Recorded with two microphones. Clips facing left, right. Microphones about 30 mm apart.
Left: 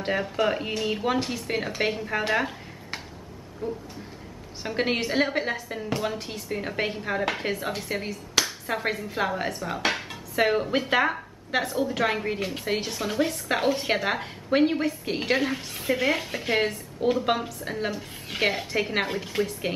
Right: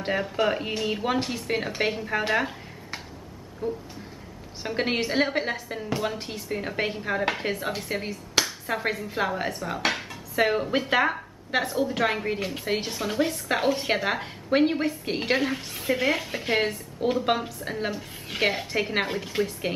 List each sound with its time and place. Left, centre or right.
0.0 s a woman's voice: centre
3.6 s a woman's voice: centre